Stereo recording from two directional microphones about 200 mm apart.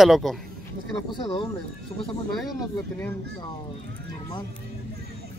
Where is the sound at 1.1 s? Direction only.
25° left (ahead or behind).